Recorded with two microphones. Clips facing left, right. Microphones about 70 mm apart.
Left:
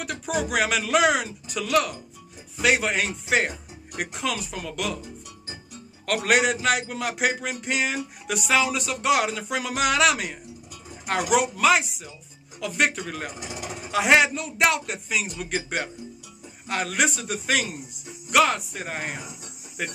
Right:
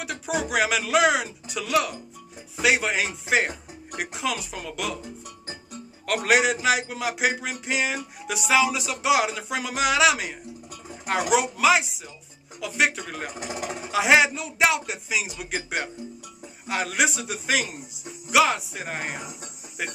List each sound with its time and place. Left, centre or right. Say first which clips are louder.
0.0 s speech: left 1 dB; centre
6.0 s speech: even; centre
13.3 s speech: right 3 dB; right
13.7 s speech: even; centre